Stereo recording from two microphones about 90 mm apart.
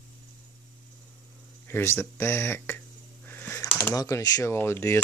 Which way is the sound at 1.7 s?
30° left (ahead or behind).